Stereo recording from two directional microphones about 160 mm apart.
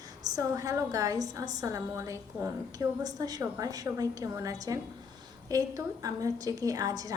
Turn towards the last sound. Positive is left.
turn(degrees=-20)  # may be behind; listen again after turning